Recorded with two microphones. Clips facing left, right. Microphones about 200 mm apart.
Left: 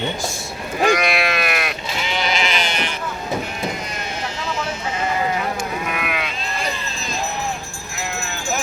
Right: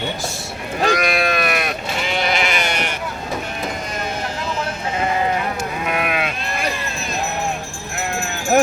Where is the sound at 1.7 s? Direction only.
50° right (ahead or behind).